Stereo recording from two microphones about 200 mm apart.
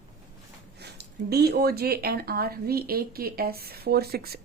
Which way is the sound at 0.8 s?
55° right (ahead or behind).